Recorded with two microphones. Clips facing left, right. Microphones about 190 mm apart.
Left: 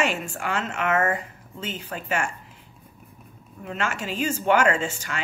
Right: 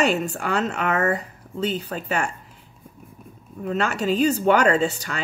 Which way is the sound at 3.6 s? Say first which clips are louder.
Right 6 dB; 40° right (ahead or behind).